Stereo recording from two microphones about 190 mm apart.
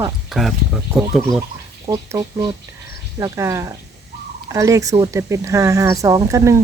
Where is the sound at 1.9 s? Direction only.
20° right (ahead or behind).